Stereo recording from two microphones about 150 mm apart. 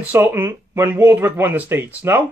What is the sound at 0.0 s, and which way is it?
Speech, 10° right (ahead or behind).